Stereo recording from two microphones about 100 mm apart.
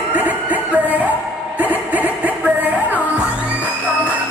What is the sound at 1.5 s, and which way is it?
Music, 15° right (ahead or behind).